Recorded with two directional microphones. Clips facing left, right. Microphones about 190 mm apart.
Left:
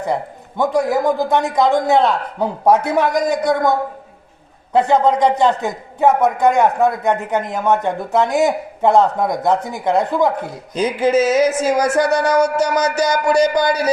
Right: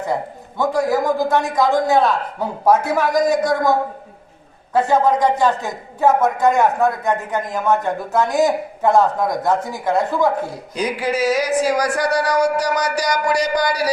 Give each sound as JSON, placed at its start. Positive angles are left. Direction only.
{"t": 0.1, "sound": "speech", "side_deg": 20}
{"t": 4.7, "sound": "speech", "side_deg": 20}